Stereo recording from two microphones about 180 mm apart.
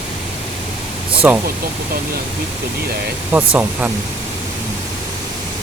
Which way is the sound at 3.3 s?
5° right (ahead or behind).